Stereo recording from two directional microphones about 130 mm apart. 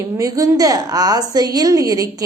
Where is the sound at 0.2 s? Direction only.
25° right (ahead or behind).